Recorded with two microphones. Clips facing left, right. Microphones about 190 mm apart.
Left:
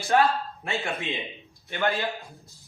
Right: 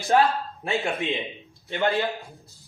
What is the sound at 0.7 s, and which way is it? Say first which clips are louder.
A man's voice: right 4 dB; 20° right (ahead or behind).